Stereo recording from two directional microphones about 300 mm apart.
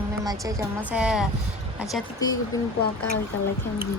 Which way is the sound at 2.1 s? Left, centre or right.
Centre.